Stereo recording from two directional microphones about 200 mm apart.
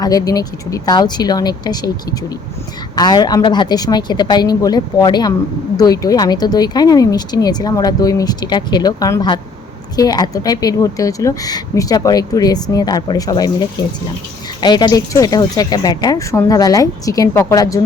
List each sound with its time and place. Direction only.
0.0 s speech: 20° left (ahead or behind)
2.9 s speech: 20° left (ahead or behind)